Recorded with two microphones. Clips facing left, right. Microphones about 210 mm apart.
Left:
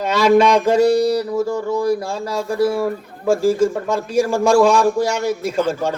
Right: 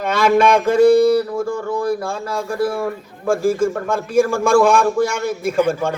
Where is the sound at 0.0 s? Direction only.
55° right (ahead or behind).